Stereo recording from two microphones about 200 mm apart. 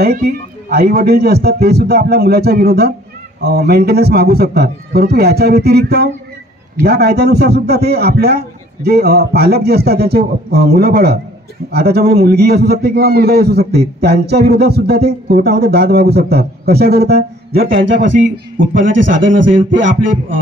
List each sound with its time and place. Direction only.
0.0 s a man's voice: 50° right (ahead or behind); by 19.9 s 70° right (ahead or behind)